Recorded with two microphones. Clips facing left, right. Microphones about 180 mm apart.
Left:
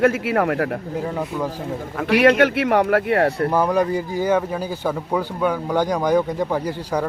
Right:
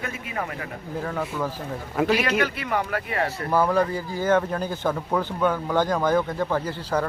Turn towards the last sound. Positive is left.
turn(degrees=15)  # may be behind; listen again after turning